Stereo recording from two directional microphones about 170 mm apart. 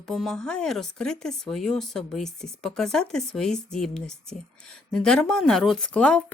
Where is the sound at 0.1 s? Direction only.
Centre (ahead or behind).